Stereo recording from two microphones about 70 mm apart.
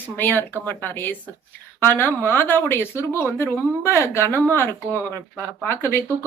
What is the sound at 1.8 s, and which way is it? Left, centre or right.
Speech, left.